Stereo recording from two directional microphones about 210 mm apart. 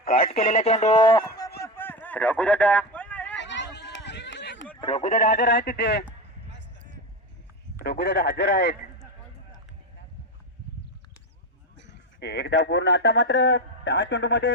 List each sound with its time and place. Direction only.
0.3 s speech: 40° left (ahead or behind); by 1.5 s 20° left (ahead or behind)
1.6 s a sound: 10° left (ahead or behind)
3.3 s a sound: 60° left (ahead or behind)
4.8 s speech: 30° left (ahead or behind); by 6.1 s 55° left (ahead or behind)
7.8 s speech: 55° left (ahead or behind)
11.8 s speech: 55° left (ahead or behind)